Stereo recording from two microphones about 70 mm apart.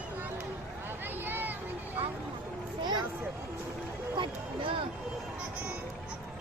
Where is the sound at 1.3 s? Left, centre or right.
Right.